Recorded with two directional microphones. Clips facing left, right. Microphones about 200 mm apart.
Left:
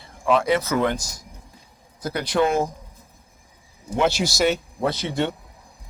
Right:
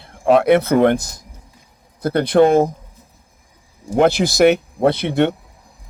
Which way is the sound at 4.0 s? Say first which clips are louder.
Right 8 dB; 55° right (ahead or behind).